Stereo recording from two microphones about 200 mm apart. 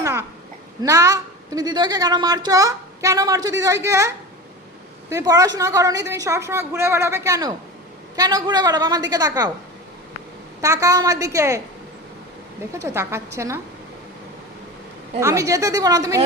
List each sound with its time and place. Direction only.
0.0 s babbling: 10° right (ahead or behind)
0.8 s a woman's voice: 15° right (ahead or behind)
10.6 s a woman's voice: 15° right (ahead or behind)
12.7 s a woman's voice: 15° right (ahead or behind)
15.2 s a woman's voice: 15° right (ahead or behind)